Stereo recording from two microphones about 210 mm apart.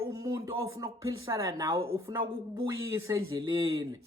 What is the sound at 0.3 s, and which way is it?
A woman's voice, 15° right (ahead or behind).